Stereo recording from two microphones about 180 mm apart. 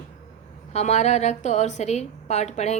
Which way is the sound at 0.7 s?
40° left (ahead or behind).